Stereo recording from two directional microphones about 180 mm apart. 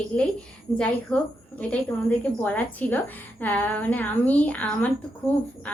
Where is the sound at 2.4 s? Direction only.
10° left (ahead or behind).